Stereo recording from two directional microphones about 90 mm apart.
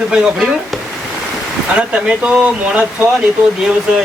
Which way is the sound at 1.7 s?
10° right (ahead or behind).